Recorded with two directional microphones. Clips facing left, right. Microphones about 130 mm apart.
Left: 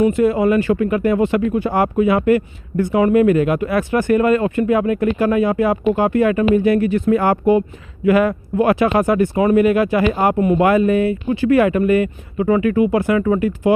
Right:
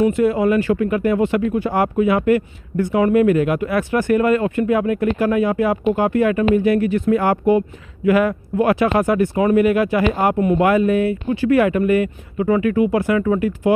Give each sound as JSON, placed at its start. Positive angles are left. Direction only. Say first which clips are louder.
{"t": 0.0, "sound": "speech", "louder": "left 1 dB", "side_deg": 30}